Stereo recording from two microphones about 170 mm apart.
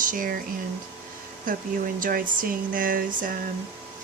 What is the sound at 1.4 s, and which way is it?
Speech, 55° right (ahead or behind).